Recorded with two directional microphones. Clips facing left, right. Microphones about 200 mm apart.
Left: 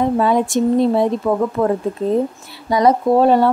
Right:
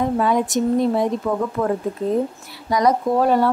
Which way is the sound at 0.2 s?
30° left (ahead or behind).